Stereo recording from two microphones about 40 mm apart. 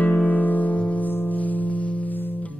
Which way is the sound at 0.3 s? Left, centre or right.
Left.